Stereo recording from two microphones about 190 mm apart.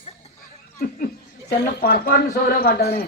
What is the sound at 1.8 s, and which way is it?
Speech, 55° left (ahead or behind).